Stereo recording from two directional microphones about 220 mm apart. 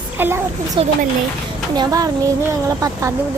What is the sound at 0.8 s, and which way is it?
A child's voice, 25° right (ahead or behind).